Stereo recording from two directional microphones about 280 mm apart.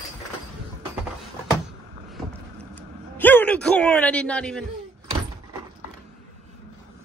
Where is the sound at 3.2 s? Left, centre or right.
Centre.